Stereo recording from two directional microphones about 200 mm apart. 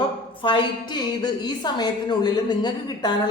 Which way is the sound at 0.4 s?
20° left (ahead or behind).